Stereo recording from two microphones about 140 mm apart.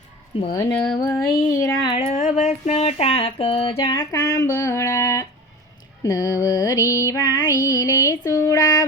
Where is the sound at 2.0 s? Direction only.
55° left (ahead or behind).